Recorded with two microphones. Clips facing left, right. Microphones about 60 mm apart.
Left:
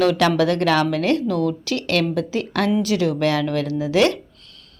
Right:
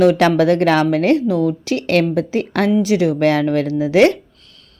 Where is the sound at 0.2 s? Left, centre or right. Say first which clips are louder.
Right 4 dB; right.